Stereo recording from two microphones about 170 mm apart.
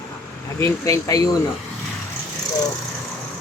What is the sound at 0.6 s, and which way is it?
Speech, 20° left (ahead or behind).